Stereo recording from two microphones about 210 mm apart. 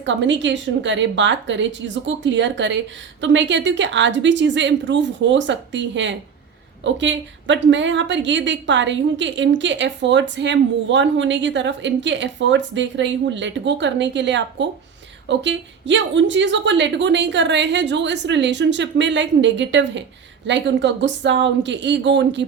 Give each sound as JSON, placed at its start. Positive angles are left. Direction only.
{"t": 0.0, "sound": "a woman's voice", "side_deg": -60}